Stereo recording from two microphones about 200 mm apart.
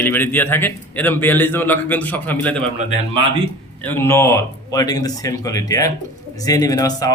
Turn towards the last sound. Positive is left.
turn(degrees=20)  # may be behind; listen again after turning